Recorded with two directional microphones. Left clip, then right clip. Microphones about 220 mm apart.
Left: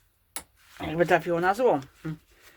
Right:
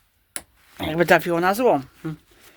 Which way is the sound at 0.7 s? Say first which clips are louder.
Right 6 dB; 45° right (ahead or behind).